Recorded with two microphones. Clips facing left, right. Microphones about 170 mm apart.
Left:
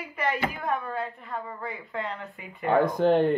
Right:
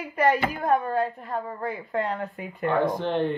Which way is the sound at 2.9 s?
45° left (ahead or behind).